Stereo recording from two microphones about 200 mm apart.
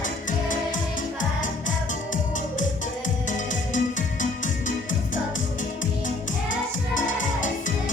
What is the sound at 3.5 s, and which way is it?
Music, 40° left (ahead or behind).